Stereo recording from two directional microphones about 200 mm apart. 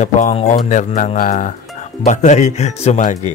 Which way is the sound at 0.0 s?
35° left (ahead or behind).